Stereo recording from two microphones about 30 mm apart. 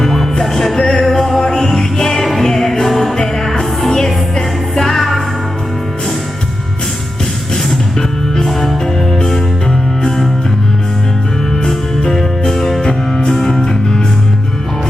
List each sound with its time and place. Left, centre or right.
0.0 s music: centre
4.9 s music: centre
7.5 s music: centre
11.6 s music: centre